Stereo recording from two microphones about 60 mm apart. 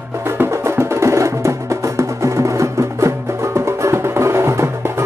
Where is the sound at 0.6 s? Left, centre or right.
Right.